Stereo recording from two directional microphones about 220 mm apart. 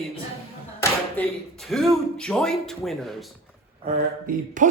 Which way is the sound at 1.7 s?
Centre (ahead or behind).